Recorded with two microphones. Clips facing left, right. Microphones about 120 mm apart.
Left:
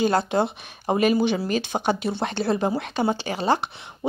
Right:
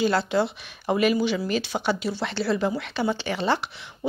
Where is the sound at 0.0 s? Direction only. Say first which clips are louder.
Left 1 dB; 45° left (ahead or behind).